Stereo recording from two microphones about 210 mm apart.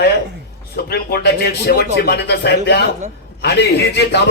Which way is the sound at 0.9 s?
45° left (ahead or behind).